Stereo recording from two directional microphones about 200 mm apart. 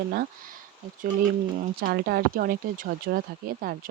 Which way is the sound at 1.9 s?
50° right (ahead or behind).